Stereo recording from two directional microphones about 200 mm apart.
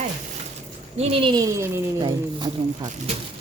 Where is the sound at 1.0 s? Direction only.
30° right (ahead or behind).